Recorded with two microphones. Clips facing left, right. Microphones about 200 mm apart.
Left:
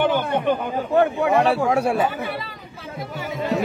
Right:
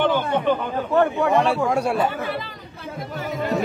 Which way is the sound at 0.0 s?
15° left (ahead or behind).